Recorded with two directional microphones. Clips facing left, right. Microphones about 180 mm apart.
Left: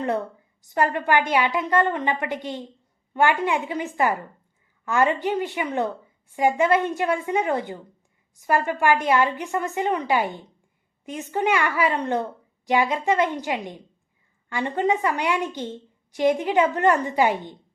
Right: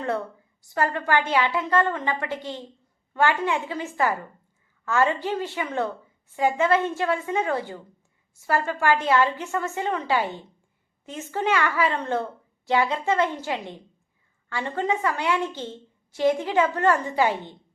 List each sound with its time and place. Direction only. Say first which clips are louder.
0.6 s a woman's voice: left 2 dB; 20° left (ahead or behind)